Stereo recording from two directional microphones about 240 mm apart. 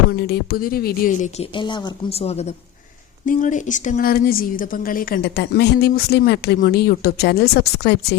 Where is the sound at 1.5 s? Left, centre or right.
Centre.